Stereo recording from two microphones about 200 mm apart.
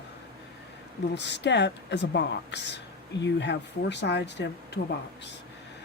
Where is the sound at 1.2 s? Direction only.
60° left (ahead or behind).